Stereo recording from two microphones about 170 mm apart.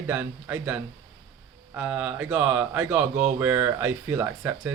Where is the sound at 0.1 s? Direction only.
10° right (ahead or behind).